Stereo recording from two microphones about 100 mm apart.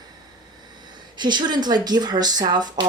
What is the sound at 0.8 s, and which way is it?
Speech, 45° right (ahead or behind).